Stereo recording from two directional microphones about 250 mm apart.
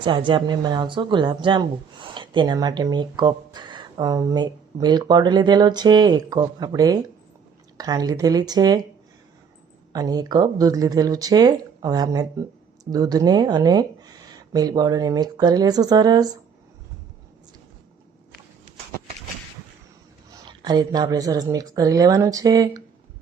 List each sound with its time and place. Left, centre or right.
0.0 s speech: centre
9.9 s speech: centre
20.4 s speech: centre